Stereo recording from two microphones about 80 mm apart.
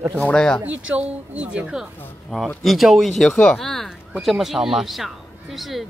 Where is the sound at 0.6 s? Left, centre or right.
Centre.